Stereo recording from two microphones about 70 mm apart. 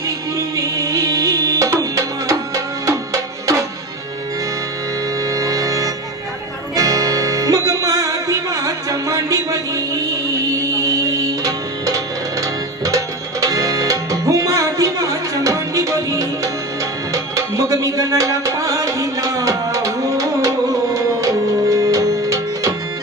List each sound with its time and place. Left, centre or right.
0.3 s music: right
5.3 s music: right
11.4 s music: right